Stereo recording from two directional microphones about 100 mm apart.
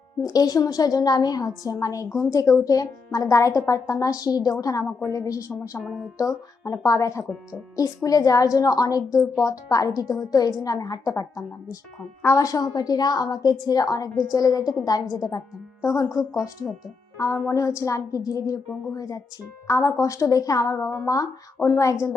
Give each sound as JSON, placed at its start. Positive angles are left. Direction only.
{"t": 0.2, "sound": "a woman's voice", "side_deg": 40}
{"t": 5.8, "sound": "speech", "side_deg": -5}
{"t": 6.1, "sound": "a woman's voice", "side_deg": 35}